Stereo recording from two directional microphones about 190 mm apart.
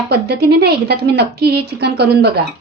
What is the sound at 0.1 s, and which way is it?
A woman's voice, 60° right (ahead or behind).